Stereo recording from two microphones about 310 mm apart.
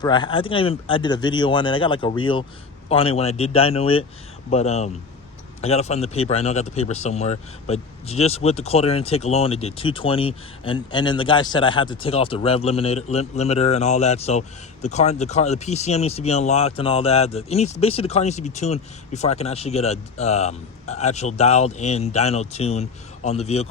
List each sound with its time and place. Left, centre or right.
0.0 s speech: centre